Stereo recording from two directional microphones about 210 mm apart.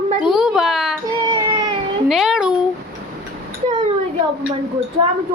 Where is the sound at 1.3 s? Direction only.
20° right (ahead or behind).